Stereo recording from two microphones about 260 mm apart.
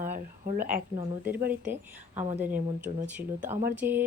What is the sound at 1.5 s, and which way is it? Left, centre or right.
Speech, centre.